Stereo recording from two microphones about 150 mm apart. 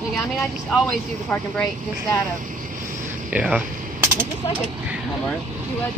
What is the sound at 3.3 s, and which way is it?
Speech, 10° right (ahead or behind).